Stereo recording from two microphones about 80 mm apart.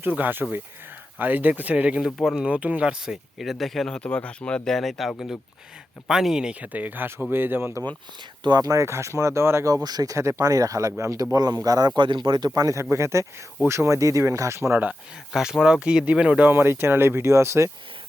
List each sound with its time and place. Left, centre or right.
0.0 s speech: right
2.0 s speech: centre; by 7.8 s right
8.4 s speech: right
9.6 s speech: right
11.6 s speech: right
11.9 s speech: right
12.5 s speech: right
12.8 s speech: right
15.3 s speech: centre
16.5 s speech: right